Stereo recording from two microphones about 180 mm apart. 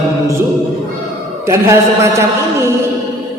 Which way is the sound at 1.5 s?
15° right (ahead or behind).